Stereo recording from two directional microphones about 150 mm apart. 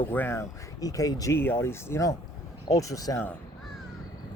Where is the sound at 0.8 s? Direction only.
25° left (ahead or behind).